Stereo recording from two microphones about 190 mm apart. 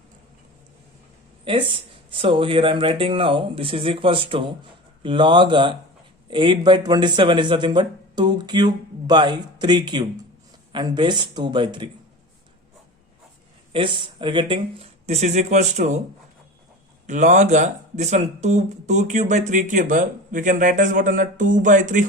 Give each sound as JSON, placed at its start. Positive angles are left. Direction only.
{"t": 2.1, "sound": "speech", "side_deg": -30}
{"t": 13.7, "sound": "speech", "side_deg": -25}
{"t": 17.1, "sound": "speech", "side_deg": -40}